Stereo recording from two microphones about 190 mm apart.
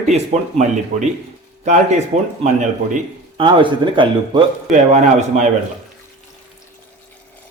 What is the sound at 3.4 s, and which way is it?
Speech, 25° right (ahead or behind).